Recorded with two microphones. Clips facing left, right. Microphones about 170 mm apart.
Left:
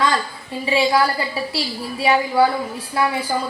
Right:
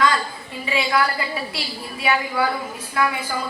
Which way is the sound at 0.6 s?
30° left (ahead or behind).